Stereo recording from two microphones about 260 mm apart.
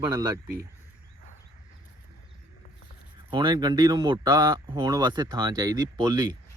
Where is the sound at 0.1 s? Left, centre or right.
Centre.